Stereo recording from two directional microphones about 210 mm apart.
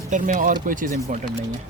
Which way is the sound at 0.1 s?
35° right (ahead or behind).